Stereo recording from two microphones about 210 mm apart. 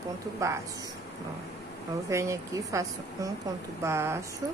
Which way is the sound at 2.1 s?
15° right (ahead or behind).